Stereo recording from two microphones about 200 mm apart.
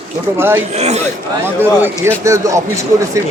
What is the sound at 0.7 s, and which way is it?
Speech, 35° right (ahead or behind).